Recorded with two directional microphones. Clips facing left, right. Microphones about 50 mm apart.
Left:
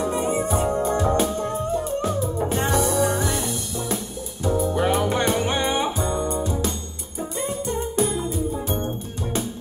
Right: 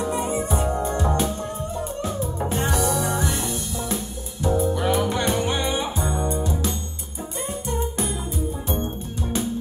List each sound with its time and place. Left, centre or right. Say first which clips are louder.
0.2 s music: left 2 dB; left
4.7 s music: left 1 dB; left
7.4 s music: even; right